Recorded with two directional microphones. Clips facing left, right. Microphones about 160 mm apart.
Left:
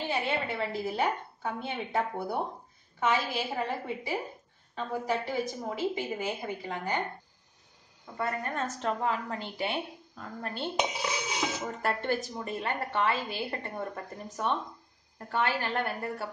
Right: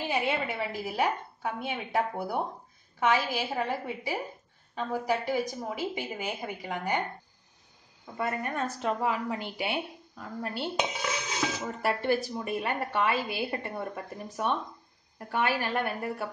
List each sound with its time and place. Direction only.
0.1 s a woman's voice: 15° right (ahead or behind)
8.2 s a woman's voice: 15° right (ahead or behind)
11.0 s music: 10° left (ahead or behind)
11.6 s a woman's voice: 10° right (ahead or behind)